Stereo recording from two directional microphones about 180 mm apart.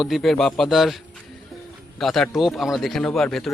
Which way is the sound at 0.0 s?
Centre (ahead or behind).